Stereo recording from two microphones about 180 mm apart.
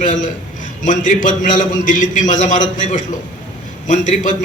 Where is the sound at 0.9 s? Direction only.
45° left (ahead or behind).